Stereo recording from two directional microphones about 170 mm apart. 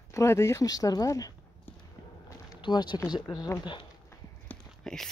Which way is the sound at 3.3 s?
20° left (ahead or behind).